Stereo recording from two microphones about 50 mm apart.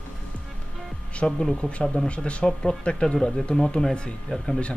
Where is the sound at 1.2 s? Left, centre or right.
Centre.